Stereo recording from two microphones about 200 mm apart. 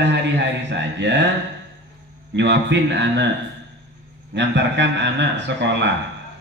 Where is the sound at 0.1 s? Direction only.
60° right (ahead or behind).